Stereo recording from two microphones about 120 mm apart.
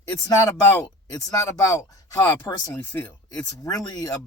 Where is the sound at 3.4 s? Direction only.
25° left (ahead or behind).